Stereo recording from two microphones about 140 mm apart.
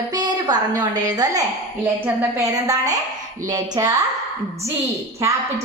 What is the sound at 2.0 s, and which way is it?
Speech, 15° right (ahead or behind).